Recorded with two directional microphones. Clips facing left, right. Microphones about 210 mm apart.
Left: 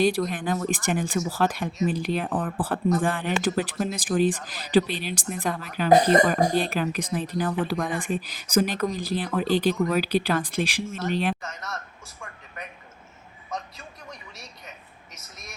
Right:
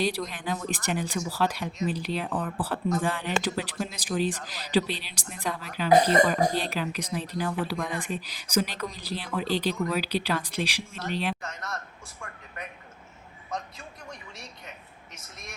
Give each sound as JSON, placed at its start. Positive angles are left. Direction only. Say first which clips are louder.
{"t": 0.0, "sound": "speech", "louder": "left 6 dB", "side_deg": 50}
{"t": 11.4, "sound": "speech", "louder": "left 1 dB", "side_deg": 0}
{"t": 13.5, "sound": "a sound", "louder": "left 1 dB", "side_deg": 0}